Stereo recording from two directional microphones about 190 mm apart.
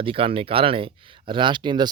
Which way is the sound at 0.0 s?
30° right (ahead or behind).